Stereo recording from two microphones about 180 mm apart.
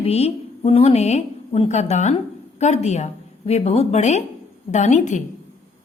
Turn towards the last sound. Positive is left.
turn(degrees=40)  # may be behind; listen again after turning